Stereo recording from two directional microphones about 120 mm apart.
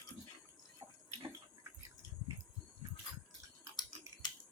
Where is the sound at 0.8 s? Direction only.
35° right (ahead or behind).